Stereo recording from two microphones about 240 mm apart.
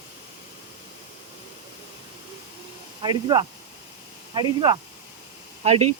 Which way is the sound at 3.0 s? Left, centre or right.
Centre.